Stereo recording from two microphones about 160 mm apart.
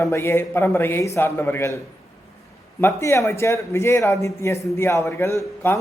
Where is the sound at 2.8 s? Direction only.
15° left (ahead or behind).